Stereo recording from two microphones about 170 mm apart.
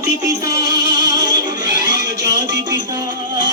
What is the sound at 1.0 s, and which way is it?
Music, 25° right (ahead or behind).